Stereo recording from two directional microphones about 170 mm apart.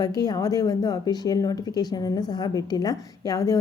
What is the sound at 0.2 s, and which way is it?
A woman's voice, 20° left (ahead or behind).